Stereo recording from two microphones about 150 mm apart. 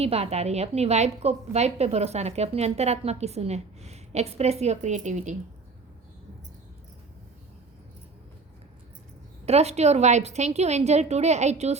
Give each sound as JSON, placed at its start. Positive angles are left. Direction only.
{"t": 0.0, "sound": "a woman's voice", "side_deg": -45}
{"t": 9.5, "sound": "a woman's voice", "side_deg": -45}